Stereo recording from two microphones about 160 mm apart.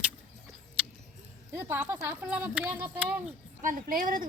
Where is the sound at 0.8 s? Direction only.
10° right (ahead or behind).